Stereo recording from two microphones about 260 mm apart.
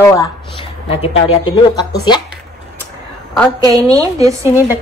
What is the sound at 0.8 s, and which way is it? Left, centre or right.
Speech, left.